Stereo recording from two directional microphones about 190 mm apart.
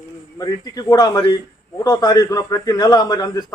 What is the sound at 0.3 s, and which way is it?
A man's voice, 20° left (ahead or behind).